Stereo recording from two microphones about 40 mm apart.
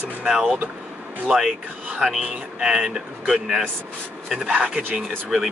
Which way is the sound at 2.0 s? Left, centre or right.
Centre.